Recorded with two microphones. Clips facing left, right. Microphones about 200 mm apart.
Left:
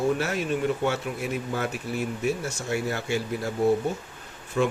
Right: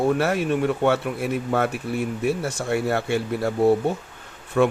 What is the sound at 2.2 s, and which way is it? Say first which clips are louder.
Speech: right 5 dB; 55° right (ahead or behind).